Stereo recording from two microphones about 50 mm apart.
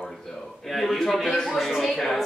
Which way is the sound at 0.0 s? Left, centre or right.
Centre.